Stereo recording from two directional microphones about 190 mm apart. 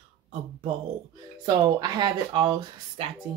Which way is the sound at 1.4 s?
20° right (ahead or behind).